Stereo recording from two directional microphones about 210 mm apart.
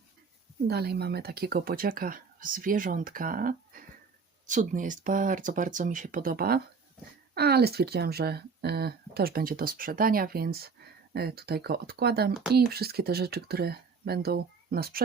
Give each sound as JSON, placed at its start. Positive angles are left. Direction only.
{"t": 0.7, "sound": "speech", "side_deg": -50}